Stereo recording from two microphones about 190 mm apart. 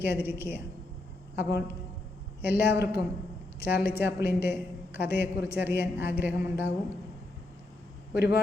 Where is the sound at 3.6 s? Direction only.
55° left (ahead or behind).